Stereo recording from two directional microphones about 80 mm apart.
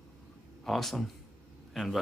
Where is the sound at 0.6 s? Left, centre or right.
Centre.